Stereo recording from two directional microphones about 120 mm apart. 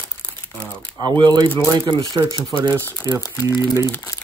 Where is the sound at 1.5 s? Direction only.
20° left (ahead or behind).